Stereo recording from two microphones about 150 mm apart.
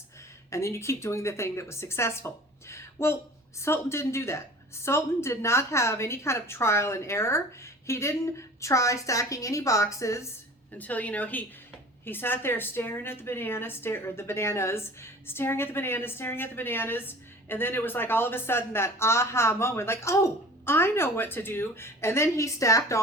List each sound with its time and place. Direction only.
0.5 s a woman's voice: 20° left (ahead or behind)
10.7 s a woman's voice: 10° left (ahead or behind)